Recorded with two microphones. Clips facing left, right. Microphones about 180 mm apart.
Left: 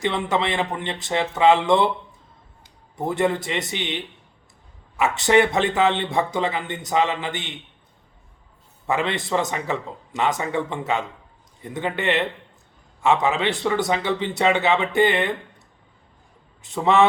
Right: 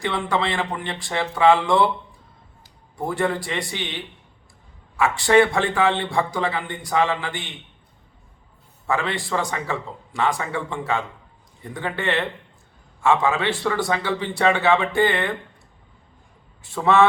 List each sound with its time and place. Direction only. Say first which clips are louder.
0.0 s a man's voice: left 1 dB; 20° left (ahead or behind)
3.0 s a man's voice: left 2 dB; 20° left (ahead or behind)
8.9 s a man's voice: left 1 dB; 20° left (ahead or behind)
16.6 s a man's voice: even; 20° left (ahead or behind)